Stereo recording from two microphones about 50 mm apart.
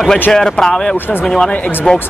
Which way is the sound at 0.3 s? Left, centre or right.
Centre.